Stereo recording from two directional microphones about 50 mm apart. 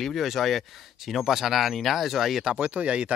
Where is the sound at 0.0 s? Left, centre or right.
Centre.